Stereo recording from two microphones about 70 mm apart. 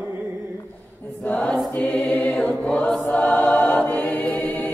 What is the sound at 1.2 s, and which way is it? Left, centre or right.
Mantra, centre.